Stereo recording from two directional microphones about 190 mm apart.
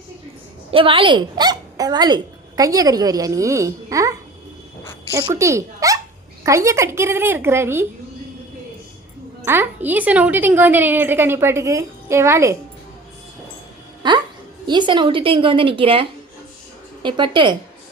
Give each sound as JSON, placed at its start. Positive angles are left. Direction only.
{"t": 0.7, "sound": "a woman's voice", "side_deg": -30}
{"t": 5.3, "sound": "a woman's voice", "side_deg": -15}
{"t": 9.4, "sound": "a woman's voice", "side_deg": -10}
{"t": 14.0, "sound": "a woman's voice", "side_deg": -25}